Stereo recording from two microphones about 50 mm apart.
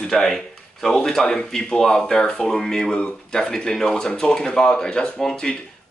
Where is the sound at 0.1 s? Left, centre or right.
Centre.